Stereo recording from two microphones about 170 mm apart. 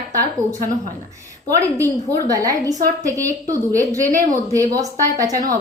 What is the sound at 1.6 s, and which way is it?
A woman's voice, 20° right (ahead or behind).